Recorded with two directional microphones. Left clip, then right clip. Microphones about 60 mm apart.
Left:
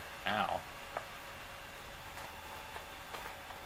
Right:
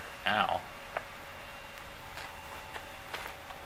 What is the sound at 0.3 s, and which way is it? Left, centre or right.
Speech, right.